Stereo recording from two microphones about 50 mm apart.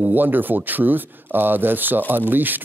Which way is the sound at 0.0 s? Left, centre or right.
Right.